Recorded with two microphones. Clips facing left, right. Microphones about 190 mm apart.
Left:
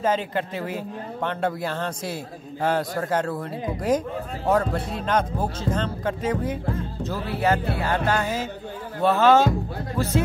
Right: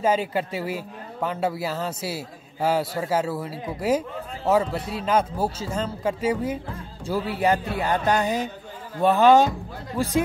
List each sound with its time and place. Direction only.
0.0 s speech: 10° right (ahead or behind)